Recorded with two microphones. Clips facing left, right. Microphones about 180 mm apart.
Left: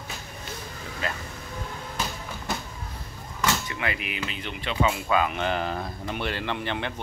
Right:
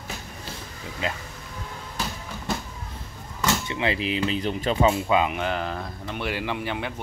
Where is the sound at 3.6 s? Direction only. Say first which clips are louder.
Right 6 dB; 25° right (ahead or behind).